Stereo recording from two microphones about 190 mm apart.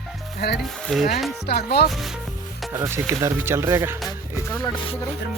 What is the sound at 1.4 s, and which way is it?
Speech, 55° left (ahead or behind).